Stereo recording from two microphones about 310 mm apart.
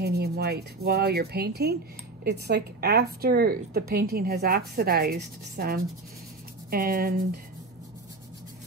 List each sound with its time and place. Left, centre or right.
0.0 s speech: right